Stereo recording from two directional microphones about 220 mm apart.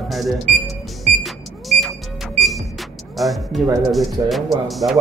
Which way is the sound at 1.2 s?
Centre (ahead or behind).